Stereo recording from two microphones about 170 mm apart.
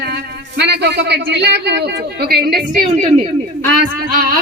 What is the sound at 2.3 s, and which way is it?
Speech, 70° right (ahead or behind).